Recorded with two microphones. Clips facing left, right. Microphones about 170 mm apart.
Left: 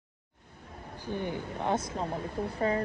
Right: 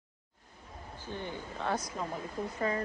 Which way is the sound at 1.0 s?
15° left (ahead or behind).